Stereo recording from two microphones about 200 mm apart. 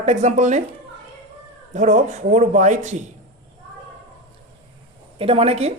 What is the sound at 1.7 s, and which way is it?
A woman's voice, 35° right (ahead or behind).